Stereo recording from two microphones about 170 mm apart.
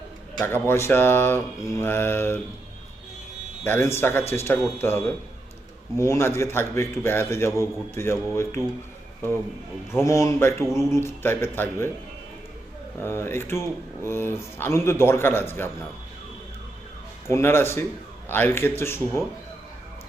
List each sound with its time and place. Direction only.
0.7 s speech: 15° left (ahead or behind)
3.7 s speech: 15° left (ahead or behind)
9.9 s speech: 15° left (ahead or behind)
13.0 s speech: 15° left (ahead or behind)
17.2 s speech: 15° left (ahead or behind)